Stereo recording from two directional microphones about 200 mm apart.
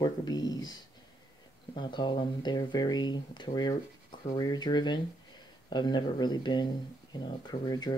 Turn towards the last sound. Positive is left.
turn(degrees=20)  # may be behind; listen again after turning